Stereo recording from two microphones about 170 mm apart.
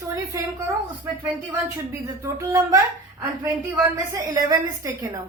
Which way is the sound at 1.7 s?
15° right (ahead or behind).